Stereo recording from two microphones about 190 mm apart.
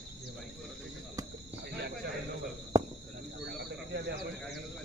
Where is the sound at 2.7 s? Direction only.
20° right (ahead or behind).